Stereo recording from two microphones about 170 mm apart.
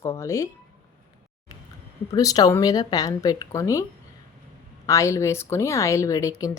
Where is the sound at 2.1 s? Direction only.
20° left (ahead or behind).